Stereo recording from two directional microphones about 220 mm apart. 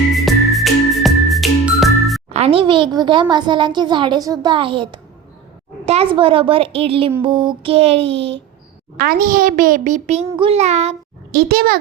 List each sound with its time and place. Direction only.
0.1 s music: centre (ahead or behind)
2.3 s a child's voice: 25° right (ahead or behind)
9.0 s a child's voice: 40° right (ahead or behind)
11.3 s a child's voice: 45° right (ahead or behind)